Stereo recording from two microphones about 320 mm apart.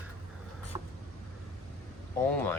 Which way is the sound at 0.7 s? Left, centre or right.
Centre.